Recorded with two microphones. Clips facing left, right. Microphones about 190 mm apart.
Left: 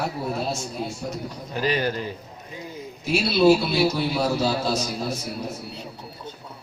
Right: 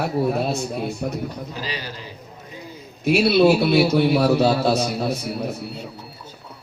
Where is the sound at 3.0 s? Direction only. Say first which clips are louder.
Right 3 dB; 60° right (ahead or behind).